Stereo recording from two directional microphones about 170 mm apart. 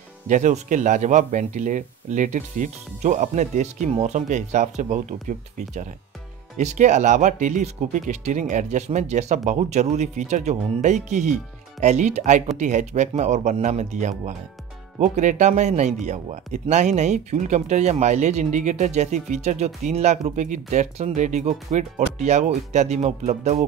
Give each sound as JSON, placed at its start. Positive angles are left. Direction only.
{"t": 0.3, "sound": "speech", "side_deg": -45}
{"t": 6.6, "sound": "speech", "side_deg": -45}